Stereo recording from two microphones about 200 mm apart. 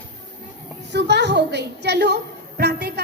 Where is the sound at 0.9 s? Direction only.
60° right (ahead or behind).